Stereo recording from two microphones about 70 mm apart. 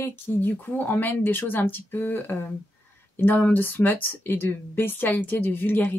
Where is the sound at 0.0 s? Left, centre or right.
Left.